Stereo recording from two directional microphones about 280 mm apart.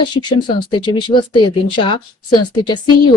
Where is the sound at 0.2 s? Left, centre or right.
Centre.